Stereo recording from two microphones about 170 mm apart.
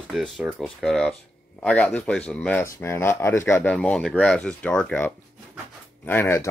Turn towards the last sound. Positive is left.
turn(degrees=15)  # may be behind; listen again after turning